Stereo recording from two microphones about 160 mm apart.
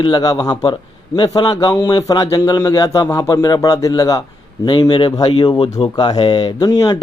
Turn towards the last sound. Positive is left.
turn(degrees=30)  # may be behind; listen again after turning